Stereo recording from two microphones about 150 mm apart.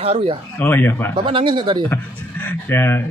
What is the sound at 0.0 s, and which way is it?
Speech, 40° right (ahead or behind).